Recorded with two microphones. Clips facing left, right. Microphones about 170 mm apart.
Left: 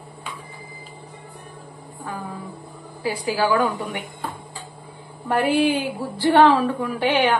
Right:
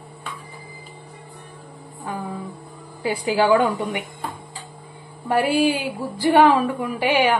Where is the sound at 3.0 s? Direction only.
25° right (ahead or behind).